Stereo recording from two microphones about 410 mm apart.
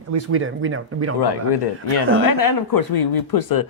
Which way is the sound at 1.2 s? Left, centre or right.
Left.